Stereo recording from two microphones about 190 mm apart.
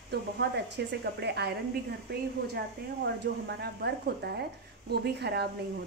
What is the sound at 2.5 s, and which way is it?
Speech, 60° right (ahead or behind).